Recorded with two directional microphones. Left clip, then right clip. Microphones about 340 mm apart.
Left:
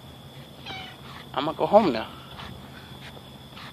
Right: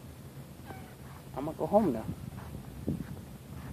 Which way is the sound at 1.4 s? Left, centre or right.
Centre.